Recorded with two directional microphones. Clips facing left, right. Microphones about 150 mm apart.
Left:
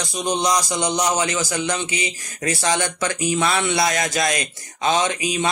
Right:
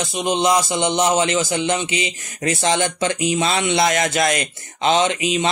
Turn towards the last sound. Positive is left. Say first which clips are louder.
# right 3 dB
turn(degrees=-25)  # may be behind; listen again after turning